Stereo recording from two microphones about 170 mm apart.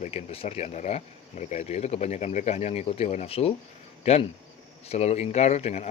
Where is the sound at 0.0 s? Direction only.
35° left (ahead or behind).